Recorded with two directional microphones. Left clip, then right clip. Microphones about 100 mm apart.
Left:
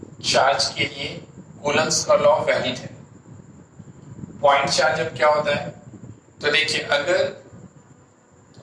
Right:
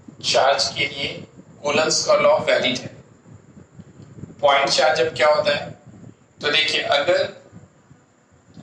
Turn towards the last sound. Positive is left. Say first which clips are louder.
# right 1 dB
turn(degrees=-30)  # may be behind; listen again after turning